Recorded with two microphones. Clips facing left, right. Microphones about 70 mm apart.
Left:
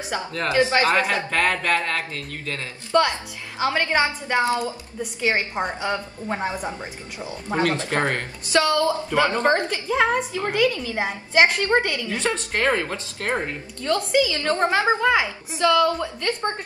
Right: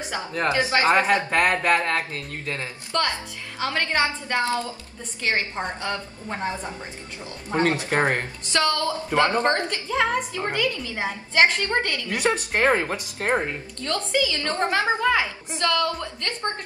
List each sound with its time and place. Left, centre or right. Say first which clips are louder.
0.3 s speech: left 2 dB; centre
2.9 s a woman's voice: left 6 dB; centre
7.7 s speech: right 1 dB; right
8.5 s a woman's voice: left 4 dB; centre
12.1 s speech: right 1 dB; centre
13.8 s a woman's voice: left 4 dB; centre
14.5 s a woman's voice: left 3 dB; left